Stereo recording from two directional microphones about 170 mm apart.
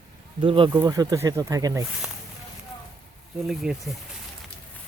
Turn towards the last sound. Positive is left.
turn(degrees=0)  # may be behind; listen again after turning